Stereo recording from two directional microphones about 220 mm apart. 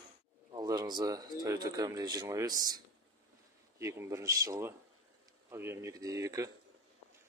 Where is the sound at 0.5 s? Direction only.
15° right (ahead or behind).